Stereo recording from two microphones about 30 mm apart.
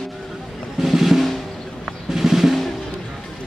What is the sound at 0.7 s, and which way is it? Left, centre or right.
Drum, centre.